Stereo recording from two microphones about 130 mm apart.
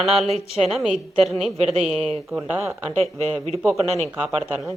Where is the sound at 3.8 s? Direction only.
55° right (ahead or behind).